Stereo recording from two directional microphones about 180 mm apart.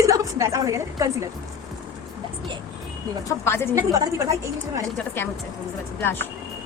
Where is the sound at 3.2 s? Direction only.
15° left (ahead or behind).